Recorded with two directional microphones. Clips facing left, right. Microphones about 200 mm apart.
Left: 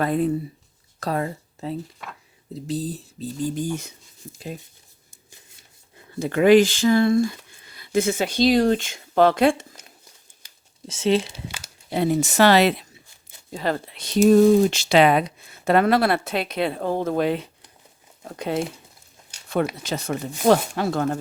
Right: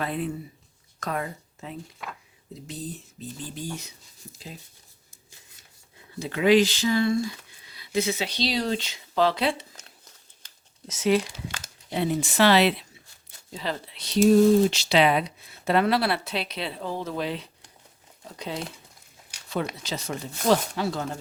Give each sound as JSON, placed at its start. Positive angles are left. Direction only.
{"t": 0.0, "sound": "speech", "side_deg": 40}
{"t": 6.1, "sound": "speech", "side_deg": 50}
{"t": 9.7, "sound": "biting", "side_deg": 10}
{"t": 10.8, "sound": "speech", "side_deg": 30}
{"t": 11.4, "sound": "crumpling", "side_deg": 10}
{"t": 11.9, "sound": "speech", "side_deg": 45}
{"t": 19.8, "sound": "speech", "side_deg": 55}